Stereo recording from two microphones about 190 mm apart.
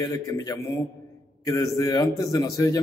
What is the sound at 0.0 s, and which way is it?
A man's voice, 20° left (ahead or behind).